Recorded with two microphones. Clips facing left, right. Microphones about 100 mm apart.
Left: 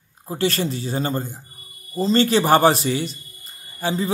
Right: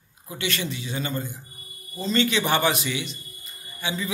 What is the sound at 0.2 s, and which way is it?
A man's voice, 35° left (ahead or behind).